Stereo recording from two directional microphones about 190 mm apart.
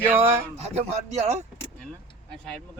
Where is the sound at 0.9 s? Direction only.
35° right (ahead or behind).